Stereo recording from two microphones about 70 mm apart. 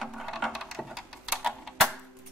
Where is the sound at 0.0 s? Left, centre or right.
Centre.